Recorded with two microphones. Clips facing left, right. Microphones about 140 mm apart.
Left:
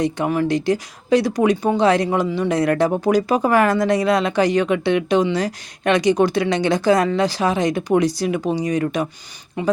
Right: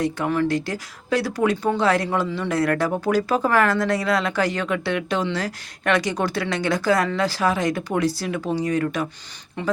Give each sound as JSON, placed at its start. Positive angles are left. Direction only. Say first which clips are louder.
{"t": 0.0, "sound": "speech", "louder": "left 2 dB", "side_deg": 15}